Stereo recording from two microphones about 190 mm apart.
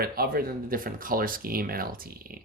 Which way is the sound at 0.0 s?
50° right (ahead or behind).